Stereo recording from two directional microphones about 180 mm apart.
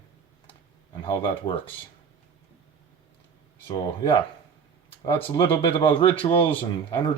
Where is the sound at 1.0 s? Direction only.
25° left (ahead or behind).